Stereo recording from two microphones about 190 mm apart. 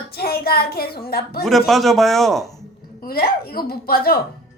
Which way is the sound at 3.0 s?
55° left (ahead or behind).